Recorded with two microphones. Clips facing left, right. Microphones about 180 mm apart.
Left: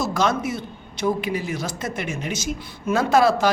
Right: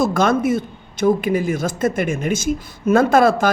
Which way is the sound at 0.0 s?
50° right (ahead or behind).